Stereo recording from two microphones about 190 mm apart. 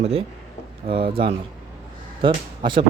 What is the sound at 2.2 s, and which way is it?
Speech, 25° right (ahead or behind).